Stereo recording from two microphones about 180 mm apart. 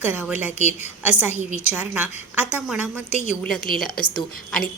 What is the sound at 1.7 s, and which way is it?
A woman's voice, 10° right (ahead or behind).